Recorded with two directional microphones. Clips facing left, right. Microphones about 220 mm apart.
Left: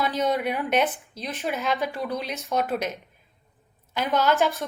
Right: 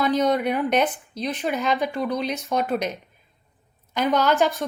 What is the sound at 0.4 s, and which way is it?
Speech, centre (ahead or behind).